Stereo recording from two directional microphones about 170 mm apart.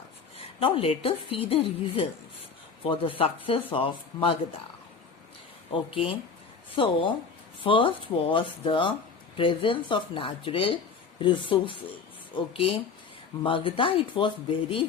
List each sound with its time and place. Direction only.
0.3 s speech: 35° left (ahead or behind)
5.9 s speech: 30° left (ahead or behind)
13.4 s speech: 30° left (ahead or behind)